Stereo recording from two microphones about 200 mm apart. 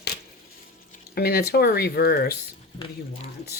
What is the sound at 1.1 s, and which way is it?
Speech, 50° left (ahead or behind).